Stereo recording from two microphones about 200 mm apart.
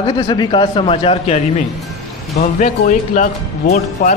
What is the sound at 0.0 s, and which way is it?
A man's voice, 20° left (ahead or behind).